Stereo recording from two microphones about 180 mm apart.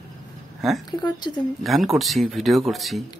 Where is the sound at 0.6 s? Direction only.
Centre (ahead or behind).